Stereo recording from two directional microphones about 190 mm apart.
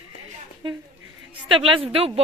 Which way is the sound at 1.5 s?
30° right (ahead or behind).